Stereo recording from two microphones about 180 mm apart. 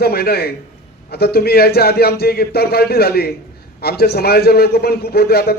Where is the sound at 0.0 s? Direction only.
60° left (ahead or behind).